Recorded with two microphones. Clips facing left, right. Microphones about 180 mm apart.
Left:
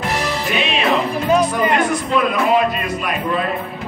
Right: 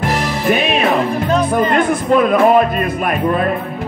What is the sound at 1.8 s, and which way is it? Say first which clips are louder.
Speech: right 5 dB; 55° right (ahead or behind).